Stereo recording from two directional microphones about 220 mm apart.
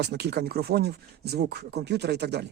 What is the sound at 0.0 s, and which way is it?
Speech, 50° right (ahead or behind).